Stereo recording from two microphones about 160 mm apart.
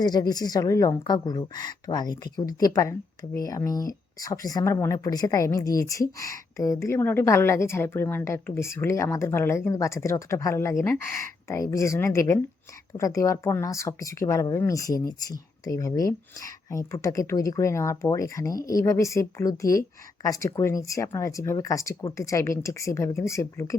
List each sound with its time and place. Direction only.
0.0 s a woman's voice: 25° left (ahead or behind)